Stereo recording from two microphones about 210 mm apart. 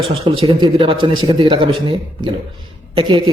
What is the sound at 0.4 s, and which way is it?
A man's voice, 25° right (ahead or behind).